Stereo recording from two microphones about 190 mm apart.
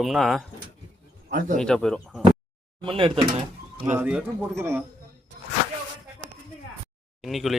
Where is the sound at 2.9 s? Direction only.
25° right (ahead or behind).